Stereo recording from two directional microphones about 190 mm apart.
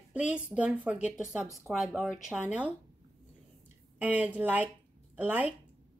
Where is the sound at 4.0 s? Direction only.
10° right (ahead or behind).